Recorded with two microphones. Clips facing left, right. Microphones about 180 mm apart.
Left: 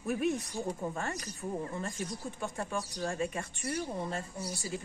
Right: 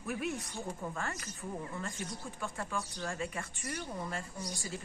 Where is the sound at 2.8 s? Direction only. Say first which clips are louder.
Left 5 dB; 35° left (ahead or behind).